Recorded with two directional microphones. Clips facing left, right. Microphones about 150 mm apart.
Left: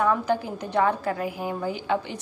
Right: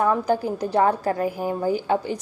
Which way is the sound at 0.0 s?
35° right (ahead or behind).